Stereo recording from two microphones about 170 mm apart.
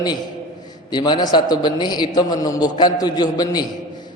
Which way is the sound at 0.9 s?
25° left (ahead or behind).